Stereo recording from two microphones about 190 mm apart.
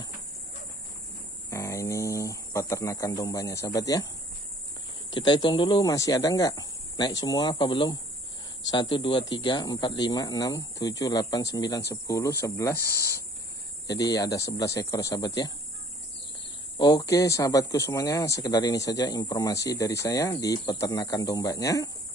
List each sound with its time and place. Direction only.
1.5 s speech: 15° left (ahead or behind)
5.1 s speech: 25° left (ahead or behind)
13.8 s speech: 20° left (ahead or behind)
16.7 s speech: 20° left (ahead or behind)